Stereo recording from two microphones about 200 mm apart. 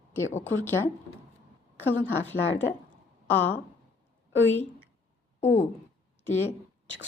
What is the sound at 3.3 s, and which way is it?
Speech, 10° left (ahead or behind).